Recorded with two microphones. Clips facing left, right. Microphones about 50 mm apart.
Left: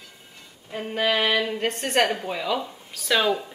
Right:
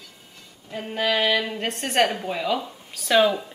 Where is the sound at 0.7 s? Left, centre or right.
Centre.